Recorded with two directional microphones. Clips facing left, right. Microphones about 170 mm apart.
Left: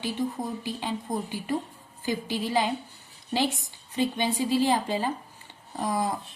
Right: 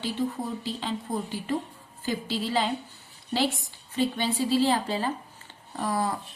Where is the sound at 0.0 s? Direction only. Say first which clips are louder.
Even; 15° left (ahead or behind).